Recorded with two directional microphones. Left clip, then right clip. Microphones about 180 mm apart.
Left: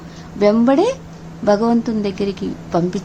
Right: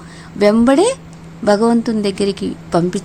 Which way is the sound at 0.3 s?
20° right (ahead or behind).